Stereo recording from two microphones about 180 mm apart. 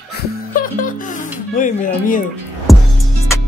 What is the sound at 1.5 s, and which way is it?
Speech, 45° left (ahead or behind).